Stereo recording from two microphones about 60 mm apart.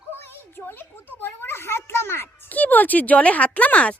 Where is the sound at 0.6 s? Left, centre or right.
Left.